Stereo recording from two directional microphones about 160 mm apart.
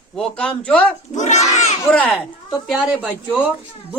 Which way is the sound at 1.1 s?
45° left (ahead or behind).